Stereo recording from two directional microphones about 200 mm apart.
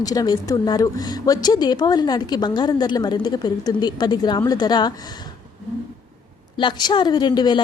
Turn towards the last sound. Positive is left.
turn(degrees=20)  # may be behind; listen again after turning